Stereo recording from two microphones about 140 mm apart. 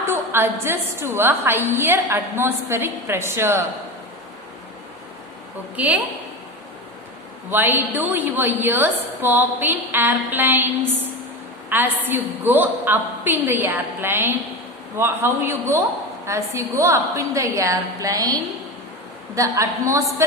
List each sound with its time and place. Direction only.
0.0 s a woman's voice: 15° right (ahead or behind)
5.7 s a woman's voice: 10° right (ahead or behind)
7.5 s a woman's voice: 15° right (ahead or behind)
19.4 s a woman's voice: 20° right (ahead or behind)